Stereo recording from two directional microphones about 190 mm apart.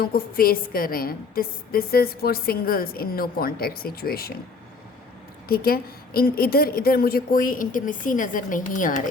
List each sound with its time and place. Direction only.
0.0 s a woman's voice: 50° left (ahead or behind)
5.5 s a woman's voice: 50° left (ahead or behind)